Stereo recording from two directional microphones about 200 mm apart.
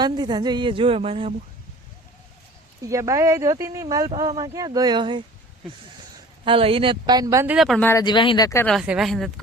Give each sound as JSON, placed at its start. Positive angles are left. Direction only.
{"t": 0.0, "sound": "a woman's voice", "side_deg": -20}
{"t": 2.8, "sound": "speech", "side_deg": -15}
{"t": 6.4, "sound": "a woman's voice", "side_deg": -25}
{"t": 7.5, "sound": "speech", "side_deg": 0}
{"t": 7.9, "sound": "speech", "side_deg": 20}
{"t": 8.6, "sound": "speech", "side_deg": 0}